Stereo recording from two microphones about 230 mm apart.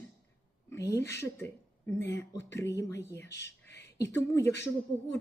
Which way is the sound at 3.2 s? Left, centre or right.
Left.